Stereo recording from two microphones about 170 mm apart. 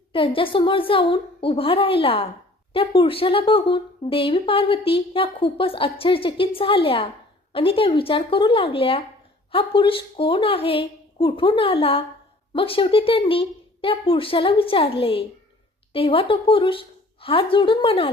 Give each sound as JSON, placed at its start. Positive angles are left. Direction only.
{"t": 0.1, "sound": "speech", "side_deg": 30}